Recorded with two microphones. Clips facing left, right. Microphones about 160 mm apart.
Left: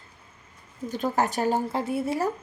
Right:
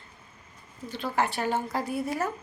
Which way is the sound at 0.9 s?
45° left (ahead or behind).